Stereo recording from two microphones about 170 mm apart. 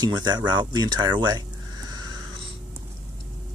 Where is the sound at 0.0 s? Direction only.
25° right (ahead or behind).